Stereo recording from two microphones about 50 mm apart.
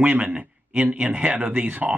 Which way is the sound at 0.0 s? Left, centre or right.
Right.